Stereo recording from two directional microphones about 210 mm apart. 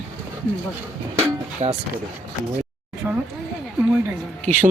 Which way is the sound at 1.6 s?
30° right (ahead or behind).